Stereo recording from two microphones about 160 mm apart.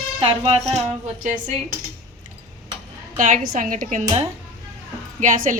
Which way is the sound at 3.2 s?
55° right (ahead or behind).